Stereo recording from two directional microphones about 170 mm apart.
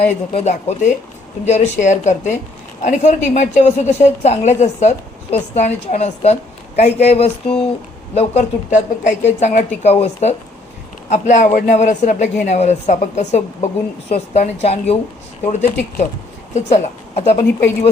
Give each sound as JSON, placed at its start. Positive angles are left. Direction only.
{"t": 0.3, "sound": "a woman's voice", "side_deg": 40}